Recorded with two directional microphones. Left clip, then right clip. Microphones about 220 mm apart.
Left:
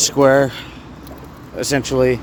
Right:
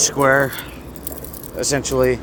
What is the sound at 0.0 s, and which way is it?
Speech, 30° left (ahead or behind).